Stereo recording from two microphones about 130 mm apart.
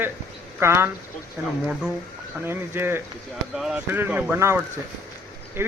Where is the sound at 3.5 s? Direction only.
5° right (ahead or behind).